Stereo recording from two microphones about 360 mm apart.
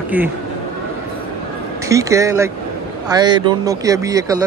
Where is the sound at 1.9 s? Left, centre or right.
Centre.